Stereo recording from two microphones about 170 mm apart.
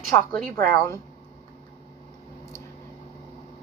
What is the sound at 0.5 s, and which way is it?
Speech, 10° left (ahead or behind).